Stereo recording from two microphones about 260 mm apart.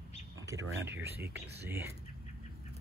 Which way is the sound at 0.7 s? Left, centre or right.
Right.